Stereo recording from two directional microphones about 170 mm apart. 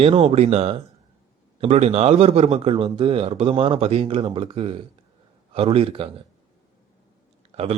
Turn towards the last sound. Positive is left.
turn(degrees=-40)  # may be behind; listen again after turning